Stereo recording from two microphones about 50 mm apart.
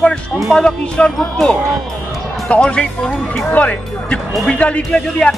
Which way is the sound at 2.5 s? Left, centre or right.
Left.